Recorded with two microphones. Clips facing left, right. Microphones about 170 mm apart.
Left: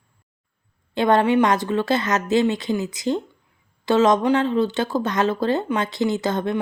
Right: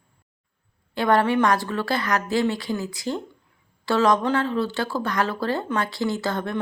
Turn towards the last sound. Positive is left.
turn(degrees=20)  # may be behind; listen again after turning